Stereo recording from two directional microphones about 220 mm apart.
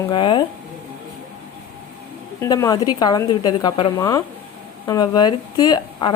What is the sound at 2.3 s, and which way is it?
A woman's voice, 15° left (ahead or behind).